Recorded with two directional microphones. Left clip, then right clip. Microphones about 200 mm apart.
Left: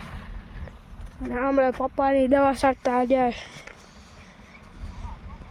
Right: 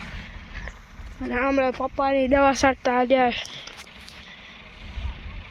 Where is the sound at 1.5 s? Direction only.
20° left (ahead or behind).